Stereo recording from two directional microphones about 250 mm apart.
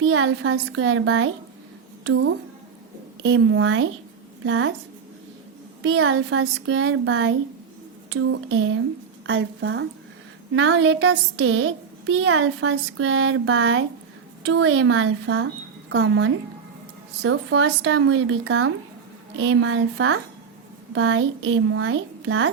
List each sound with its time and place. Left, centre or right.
0.0 s a woman's voice: right
3.2 s a woman's voice: right
5.9 s a woman's voice: right